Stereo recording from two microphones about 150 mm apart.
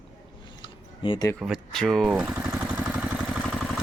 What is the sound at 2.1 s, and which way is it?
Speech, 10° right (ahead or behind).